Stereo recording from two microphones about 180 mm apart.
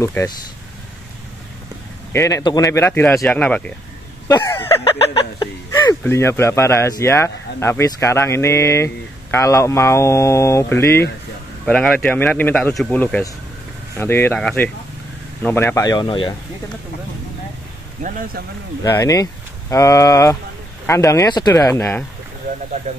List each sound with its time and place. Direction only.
0.0 s speech: 15° left (ahead or behind)
2.1 s speech: 20° left (ahead or behind)
4.3 s a sound: 15° left (ahead or behind)
4.8 s speech: 20° left (ahead or behind)
18.0 s a man's voice: 45° right (ahead or behind)
18.9 s speech: 20° left (ahead or behind)